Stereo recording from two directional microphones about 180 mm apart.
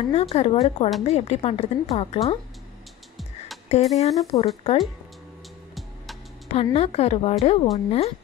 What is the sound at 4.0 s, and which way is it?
Speech, 35° left (ahead or behind).